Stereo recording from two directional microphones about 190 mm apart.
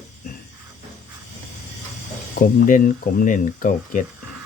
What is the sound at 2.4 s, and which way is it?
Speech, 45° left (ahead or behind).